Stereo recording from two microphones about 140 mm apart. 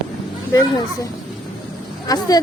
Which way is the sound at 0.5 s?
25° left (ahead or behind).